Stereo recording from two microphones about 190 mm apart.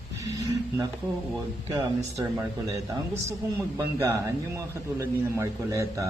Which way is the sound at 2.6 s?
20° right (ahead or behind).